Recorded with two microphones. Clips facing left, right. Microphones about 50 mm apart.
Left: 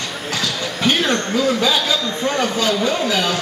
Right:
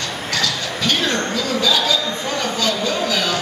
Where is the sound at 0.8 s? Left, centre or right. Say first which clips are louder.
Left 2 dB; left.